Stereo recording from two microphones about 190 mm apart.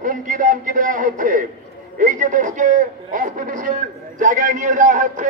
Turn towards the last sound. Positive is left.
turn(degrees=-40)  # may be behind; listen again after turning